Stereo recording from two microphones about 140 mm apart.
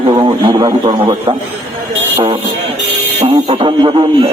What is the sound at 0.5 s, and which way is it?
Speech, 30° right (ahead or behind).